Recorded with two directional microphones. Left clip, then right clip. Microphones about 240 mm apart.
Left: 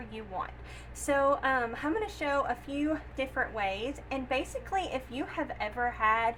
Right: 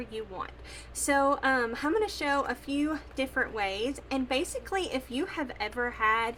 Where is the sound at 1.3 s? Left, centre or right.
Right.